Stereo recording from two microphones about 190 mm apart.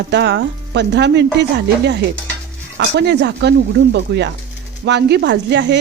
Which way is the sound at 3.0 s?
65° right (ahead or behind).